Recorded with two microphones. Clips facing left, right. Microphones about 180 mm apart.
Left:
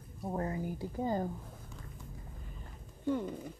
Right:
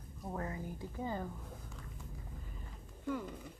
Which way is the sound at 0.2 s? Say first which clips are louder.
Left 6 dB; 35° left (ahead or behind).